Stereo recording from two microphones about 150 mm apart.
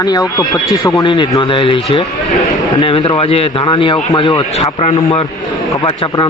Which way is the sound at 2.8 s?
40° left (ahead or behind).